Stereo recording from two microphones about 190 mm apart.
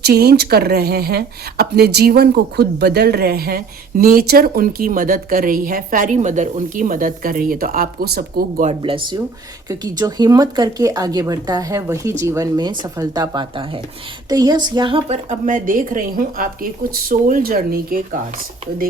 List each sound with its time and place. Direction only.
0.0 s speech: 55° right (ahead or behind)
8.6 s a woman's voice: 25° right (ahead or behind); by 18.2 s 50° right (ahead or behind)